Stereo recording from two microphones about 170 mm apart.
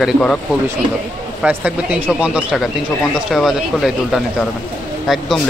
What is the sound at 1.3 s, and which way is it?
Speech, 5° right (ahead or behind).